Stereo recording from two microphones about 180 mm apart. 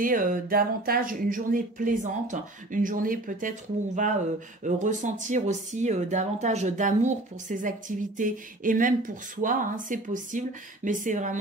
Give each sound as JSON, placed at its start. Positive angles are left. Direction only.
{"t": 0.0, "sound": "speech", "side_deg": -50}